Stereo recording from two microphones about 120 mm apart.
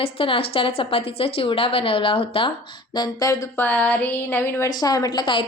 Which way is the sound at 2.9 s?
30° left (ahead or behind).